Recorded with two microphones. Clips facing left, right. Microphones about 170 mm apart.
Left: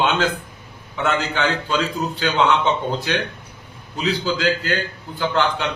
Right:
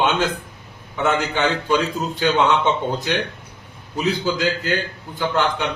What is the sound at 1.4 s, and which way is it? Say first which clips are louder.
Speech: right 2 dB; 15° right (ahead or behind).